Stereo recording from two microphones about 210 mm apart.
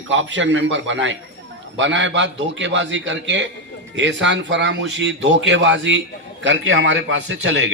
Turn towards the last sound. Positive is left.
turn(degrees=-65)  # may be behind; listen again after turning